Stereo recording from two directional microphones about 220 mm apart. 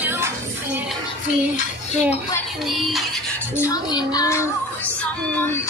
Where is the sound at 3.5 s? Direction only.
15° left (ahead or behind).